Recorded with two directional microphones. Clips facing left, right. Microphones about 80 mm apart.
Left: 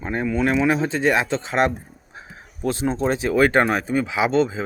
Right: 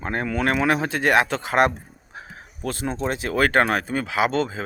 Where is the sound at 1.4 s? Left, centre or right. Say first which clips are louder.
Even; right.